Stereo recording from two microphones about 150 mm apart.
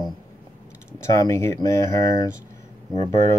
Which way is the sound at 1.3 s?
20° left (ahead or behind).